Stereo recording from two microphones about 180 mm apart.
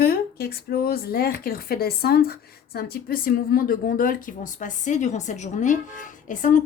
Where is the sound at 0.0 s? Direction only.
55° left (ahead or behind).